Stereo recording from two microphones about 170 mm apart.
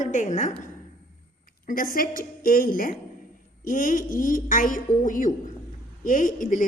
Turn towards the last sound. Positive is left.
turn(degrees=50)  # may be behind; listen again after turning